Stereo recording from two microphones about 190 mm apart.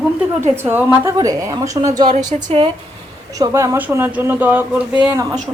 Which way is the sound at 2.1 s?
35° right (ahead or behind).